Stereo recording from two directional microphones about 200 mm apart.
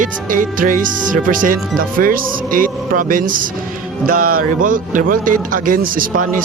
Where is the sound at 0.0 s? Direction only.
40° right (ahead or behind).